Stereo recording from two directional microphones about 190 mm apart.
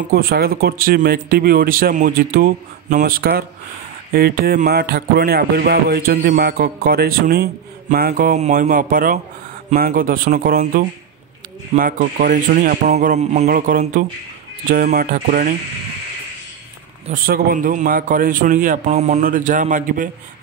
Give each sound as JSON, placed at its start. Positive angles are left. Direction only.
{"t": 0.1, "sound": "speech", "side_deg": -50}
{"t": 17.1, "sound": "speech", "side_deg": -45}